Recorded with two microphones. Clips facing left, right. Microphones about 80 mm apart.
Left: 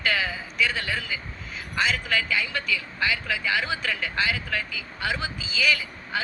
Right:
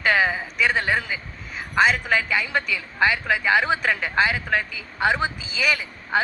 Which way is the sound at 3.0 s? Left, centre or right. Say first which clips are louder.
Right 8 dB; right.